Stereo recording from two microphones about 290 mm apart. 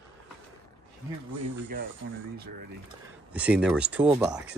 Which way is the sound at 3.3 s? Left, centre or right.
Centre.